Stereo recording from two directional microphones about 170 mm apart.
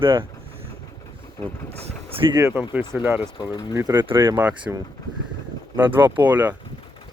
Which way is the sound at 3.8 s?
20° right (ahead or behind).